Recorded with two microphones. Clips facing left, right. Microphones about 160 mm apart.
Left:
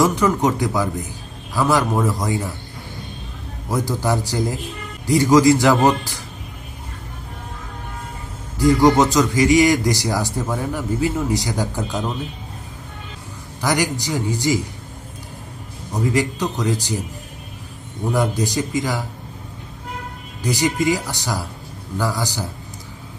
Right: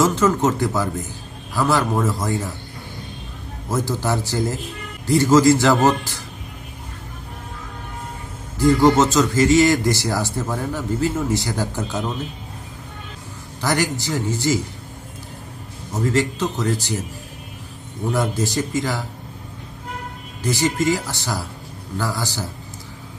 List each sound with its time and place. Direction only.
0.0 s speech: 15° left (ahead or behind)
3.7 s speech: 15° left (ahead or behind)
8.5 s speech: 15° left (ahead or behind)
13.6 s speech: 15° left (ahead or behind)
15.9 s speech: 15° left (ahead or behind)
18.1 s speech: 15° left (ahead or behind)
20.4 s speech: 15° left (ahead or behind)